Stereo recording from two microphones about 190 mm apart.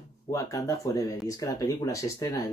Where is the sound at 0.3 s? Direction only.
15° left (ahead or behind).